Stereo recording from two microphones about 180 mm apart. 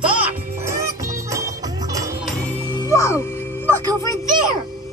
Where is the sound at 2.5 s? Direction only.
25° left (ahead or behind).